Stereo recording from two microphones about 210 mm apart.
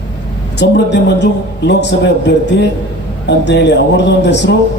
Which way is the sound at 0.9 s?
55° left (ahead or behind).